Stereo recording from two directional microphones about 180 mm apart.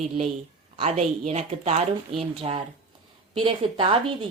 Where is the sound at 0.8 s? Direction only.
40° right (ahead or behind).